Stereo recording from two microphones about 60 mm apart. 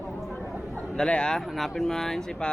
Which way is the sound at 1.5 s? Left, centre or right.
Centre.